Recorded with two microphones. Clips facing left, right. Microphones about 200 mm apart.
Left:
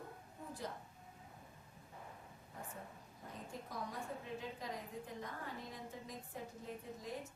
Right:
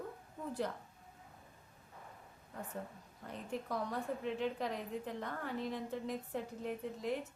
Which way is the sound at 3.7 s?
70° right (ahead or behind).